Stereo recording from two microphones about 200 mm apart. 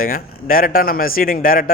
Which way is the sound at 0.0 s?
45° left (ahead or behind).